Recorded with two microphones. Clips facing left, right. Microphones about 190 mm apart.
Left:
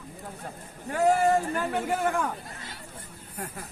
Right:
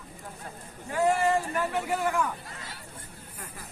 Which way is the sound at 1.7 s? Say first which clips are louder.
Left 1 dB; 50° left (ahead or behind).